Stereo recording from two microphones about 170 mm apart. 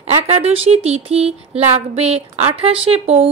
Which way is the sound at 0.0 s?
35° right (ahead or behind).